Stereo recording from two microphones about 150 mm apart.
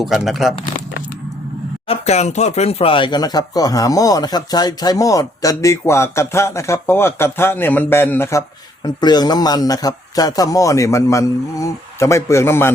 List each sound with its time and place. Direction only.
0.0 s speech: 5° right (ahead or behind)
1.9 s speech: 45° left (ahead or behind); by 12.7 s 15° left (ahead or behind)